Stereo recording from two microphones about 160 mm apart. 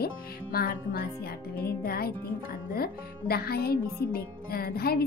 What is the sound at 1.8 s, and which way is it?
Speech, 70° left (ahead or behind).